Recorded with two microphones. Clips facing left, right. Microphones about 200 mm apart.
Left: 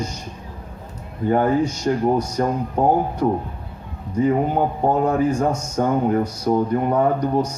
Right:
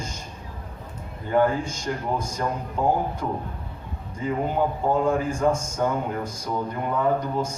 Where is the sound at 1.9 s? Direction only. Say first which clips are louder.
Left 7 dB; 35° left (ahead or behind).